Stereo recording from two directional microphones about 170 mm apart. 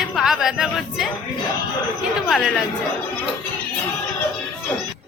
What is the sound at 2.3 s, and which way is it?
Speech, centre (ahead or behind).